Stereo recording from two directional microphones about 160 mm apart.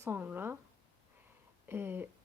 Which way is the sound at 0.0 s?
15° right (ahead or behind).